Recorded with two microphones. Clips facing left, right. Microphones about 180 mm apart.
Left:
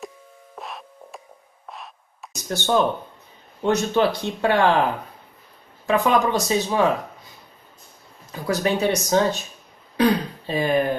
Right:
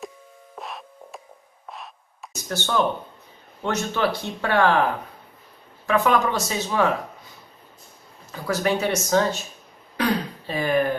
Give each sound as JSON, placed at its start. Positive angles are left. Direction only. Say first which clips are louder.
{"t": 0.6, "sound": "music", "louder": "even", "side_deg": 0}
{"t": 1.7, "sound": "a sound", "louder": "even", "side_deg": 0}
{"t": 2.4, "sound": "speech", "louder": "left 3 dB", "side_deg": 20}
{"t": 5.9, "sound": "speech", "louder": "left 1 dB", "side_deg": 20}
{"t": 8.3, "sound": "speech", "louder": "left 1 dB", "side_deg": 15}
{"t": 9.9, "sound": "a sound", "louder": "left 4 dB", "side_deg": 20}